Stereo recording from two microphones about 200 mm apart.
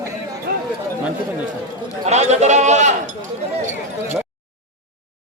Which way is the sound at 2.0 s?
35° right (ahead or behind).